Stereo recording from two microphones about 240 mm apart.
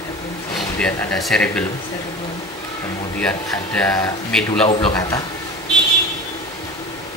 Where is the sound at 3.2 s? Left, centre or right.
Centre.